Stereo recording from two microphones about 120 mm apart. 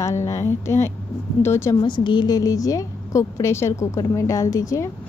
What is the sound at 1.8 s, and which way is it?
Speech, 40° left (ahead or behind).